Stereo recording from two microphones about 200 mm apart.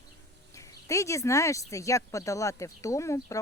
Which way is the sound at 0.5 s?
15° left (ahead or behind).